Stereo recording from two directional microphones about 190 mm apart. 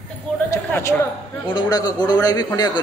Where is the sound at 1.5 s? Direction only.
20° left (ahead or behind).